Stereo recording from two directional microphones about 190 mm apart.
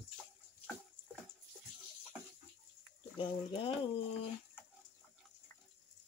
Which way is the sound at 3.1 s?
25° left (ahead or behind).